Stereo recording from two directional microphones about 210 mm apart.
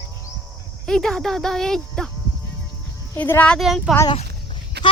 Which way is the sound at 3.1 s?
10° left (ahead or behind).